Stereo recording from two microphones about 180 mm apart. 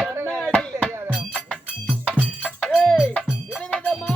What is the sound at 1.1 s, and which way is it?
Cowbell, centre (ahead or behind).